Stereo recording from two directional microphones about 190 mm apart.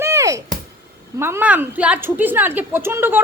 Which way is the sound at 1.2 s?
10° right (ahead or behind).